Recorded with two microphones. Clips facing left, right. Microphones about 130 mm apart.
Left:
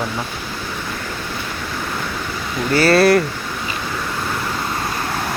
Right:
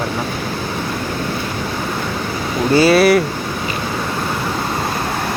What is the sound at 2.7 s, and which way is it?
Speech, 20° right (ahead or behind).